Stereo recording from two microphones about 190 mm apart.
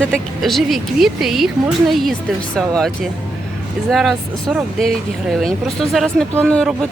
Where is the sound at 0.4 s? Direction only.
Centre (ahead or behind).